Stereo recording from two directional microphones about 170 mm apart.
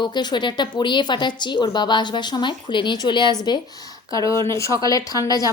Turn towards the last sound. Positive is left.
turn(degrees=20)  # may be behind; listen again after turning